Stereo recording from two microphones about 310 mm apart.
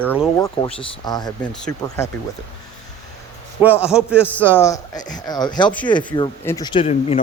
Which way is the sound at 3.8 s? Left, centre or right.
Centre.